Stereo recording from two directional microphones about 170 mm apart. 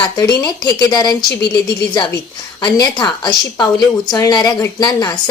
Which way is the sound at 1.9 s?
25° left (ahead or behind).